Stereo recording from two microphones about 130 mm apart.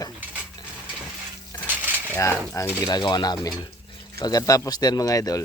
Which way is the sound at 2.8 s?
35° left (ahead or behind).